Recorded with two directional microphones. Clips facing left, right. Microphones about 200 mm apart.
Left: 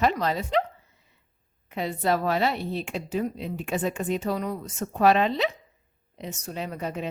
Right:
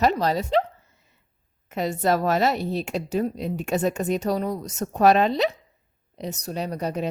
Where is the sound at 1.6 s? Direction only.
45° right (ahead or behind).